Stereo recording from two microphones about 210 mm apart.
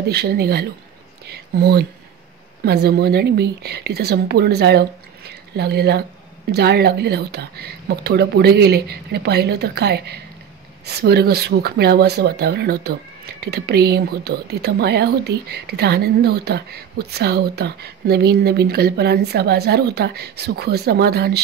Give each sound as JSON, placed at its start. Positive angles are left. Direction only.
{"t": 0.1, "sound": "speech", "side_deg": -50}